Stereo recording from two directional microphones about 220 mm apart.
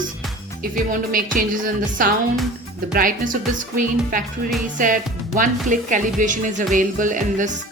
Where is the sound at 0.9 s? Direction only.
40° right (ahead or behind).